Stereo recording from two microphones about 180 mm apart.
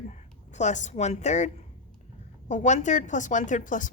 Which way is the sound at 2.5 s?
40° left (ahead or behind).